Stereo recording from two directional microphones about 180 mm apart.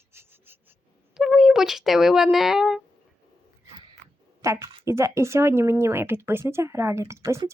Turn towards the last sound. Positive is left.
turn(degrees=-15)  # may be behind; listen again after turning